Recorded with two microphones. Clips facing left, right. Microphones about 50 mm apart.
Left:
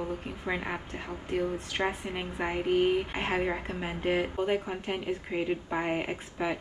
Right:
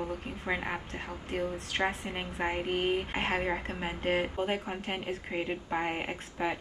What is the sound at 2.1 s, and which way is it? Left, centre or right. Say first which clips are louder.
A woman's voice: left 1 dB; centre.